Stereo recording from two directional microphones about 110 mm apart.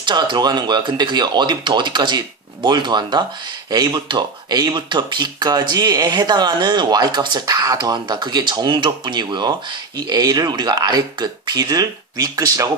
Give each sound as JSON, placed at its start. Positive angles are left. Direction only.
{"t": 0.0, "sound": "speech", "side_deg": -45}